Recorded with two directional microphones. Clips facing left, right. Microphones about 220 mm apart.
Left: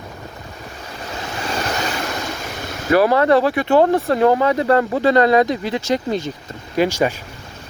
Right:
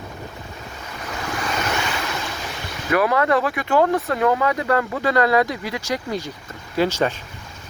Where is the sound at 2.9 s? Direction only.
30° left (ahead or behind).